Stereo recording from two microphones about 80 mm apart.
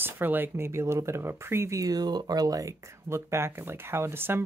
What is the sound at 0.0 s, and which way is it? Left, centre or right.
Speech, right.